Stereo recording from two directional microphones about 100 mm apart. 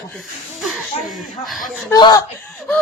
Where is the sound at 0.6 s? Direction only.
Centre (ahead or behind).